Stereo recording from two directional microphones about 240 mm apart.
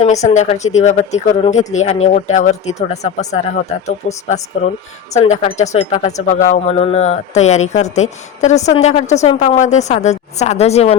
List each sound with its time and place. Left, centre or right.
0.0 s speech: left